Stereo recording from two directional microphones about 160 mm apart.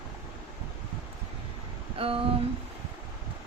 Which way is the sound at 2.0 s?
35° right (ahead or behind).